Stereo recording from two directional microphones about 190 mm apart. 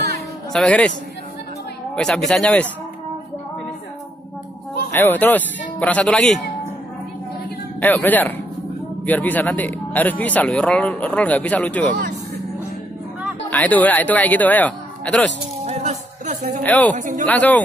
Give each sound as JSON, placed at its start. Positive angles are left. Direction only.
{"t": 0.5, "sound": "speech", "side_deg": 5}
{"t": 2.0, "sound": "speech", "side_deg": 0}
{"t": 4.9, "sound": "speech", "side_deg": 10}
{"t": 7.8, "sound": "speech", "side_deg": 10}
{"t": 13.5, "sound": "speech", "side_deg": 10}
{"t": 15.6, "sound": "a sound", "side_deg": -35}
{"t": 16.6, "sound": "speech", "side_deg": 10}
{"t": 16.9, "sound": "speech", "side_deg": -40}
{"t": 17.3, "sound": "speech", "side_deg": 10}